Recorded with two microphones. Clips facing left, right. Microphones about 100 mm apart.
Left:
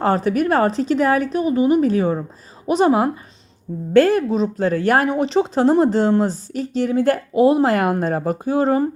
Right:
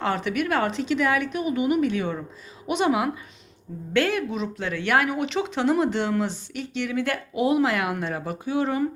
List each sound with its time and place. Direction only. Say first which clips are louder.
0.0 s speech: left 7 dB; 40° left (ahead or behind)